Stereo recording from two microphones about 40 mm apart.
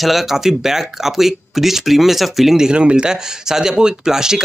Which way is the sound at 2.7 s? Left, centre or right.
Right.